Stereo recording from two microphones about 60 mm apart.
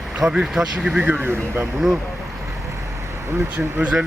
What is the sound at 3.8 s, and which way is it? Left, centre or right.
Speech, right.